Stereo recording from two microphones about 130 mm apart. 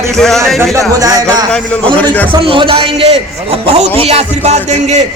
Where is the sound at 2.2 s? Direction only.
40° right (ahead or behind); by 5.0 s 65° right (ahead or behind).